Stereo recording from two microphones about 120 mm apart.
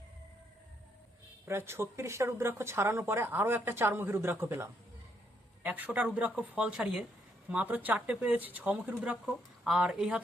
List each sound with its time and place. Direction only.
1.5 s speech: 20° right (ahead or behind); by 10.2 s 5° right (ahead or behind)